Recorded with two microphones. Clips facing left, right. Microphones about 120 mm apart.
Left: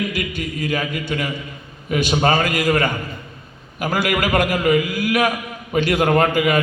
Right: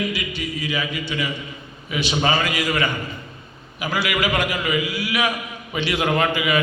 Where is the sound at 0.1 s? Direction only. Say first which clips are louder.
Left 2 dB; 50° left (ahead or behind).